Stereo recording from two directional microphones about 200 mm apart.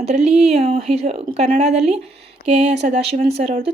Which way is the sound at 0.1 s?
35° right (ahead or behind).